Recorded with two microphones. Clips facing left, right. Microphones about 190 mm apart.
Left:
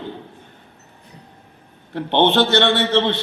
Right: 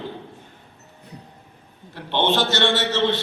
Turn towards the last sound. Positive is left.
turn(degrees=60)  # may be behind; listen again after turning